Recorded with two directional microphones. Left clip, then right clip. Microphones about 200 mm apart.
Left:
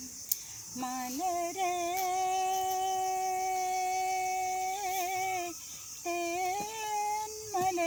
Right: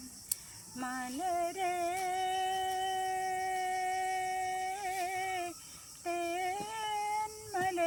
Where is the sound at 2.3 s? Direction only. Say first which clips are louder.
Left 3 dB; 25° right (ahead or behind).